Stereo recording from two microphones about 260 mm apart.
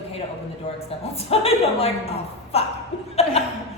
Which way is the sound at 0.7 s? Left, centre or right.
Left.